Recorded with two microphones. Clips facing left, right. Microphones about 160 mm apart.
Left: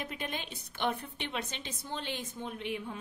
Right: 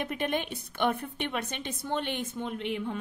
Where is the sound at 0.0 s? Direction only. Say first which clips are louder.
Right 8 dB; 60° right (ahead or behind).